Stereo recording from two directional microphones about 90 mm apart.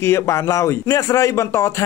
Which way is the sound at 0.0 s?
30° left (ahead or behind).